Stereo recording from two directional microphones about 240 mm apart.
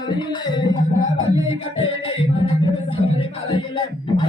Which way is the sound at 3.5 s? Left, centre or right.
Centre.